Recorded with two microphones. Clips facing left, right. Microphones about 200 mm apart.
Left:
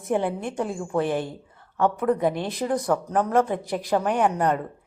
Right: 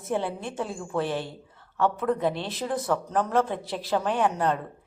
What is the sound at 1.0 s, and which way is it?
Speech, 50° left (ahead or behind).